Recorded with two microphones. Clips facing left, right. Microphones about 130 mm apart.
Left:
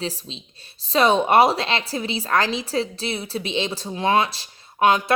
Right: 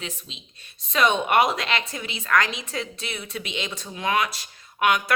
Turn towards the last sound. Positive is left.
turn(degrees=30)  # may be behind; listen again after turning